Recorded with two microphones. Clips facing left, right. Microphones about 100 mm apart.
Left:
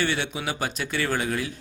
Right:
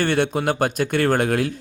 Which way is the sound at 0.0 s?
50° right (ahead or behind).